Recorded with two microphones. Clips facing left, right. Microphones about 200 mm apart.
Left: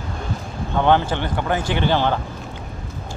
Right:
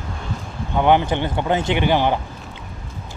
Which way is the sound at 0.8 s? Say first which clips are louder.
Right 1 dB; 15° right (ahead or behind).